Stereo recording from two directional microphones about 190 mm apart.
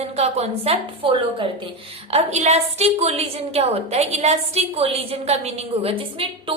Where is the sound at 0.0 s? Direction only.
35° right (ahead or behind).